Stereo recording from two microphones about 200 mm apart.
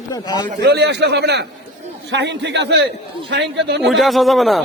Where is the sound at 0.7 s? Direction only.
55° right (ahead or behind).